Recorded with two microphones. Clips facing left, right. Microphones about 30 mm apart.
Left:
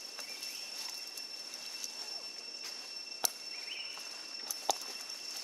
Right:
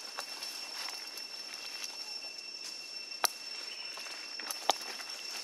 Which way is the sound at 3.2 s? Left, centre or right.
Right.